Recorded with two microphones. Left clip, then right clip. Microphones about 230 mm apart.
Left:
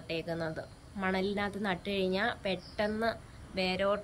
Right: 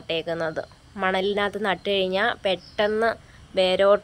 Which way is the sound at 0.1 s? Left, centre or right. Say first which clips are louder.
Right 10 dB; centre.